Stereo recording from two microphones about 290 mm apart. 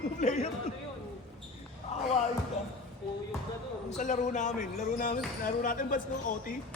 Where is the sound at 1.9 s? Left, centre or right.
Left.